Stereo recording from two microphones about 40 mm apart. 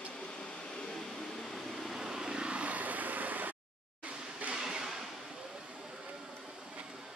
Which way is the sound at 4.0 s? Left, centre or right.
Right.